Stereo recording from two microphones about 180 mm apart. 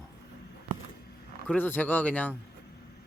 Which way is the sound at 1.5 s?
10° left (ahead or behind).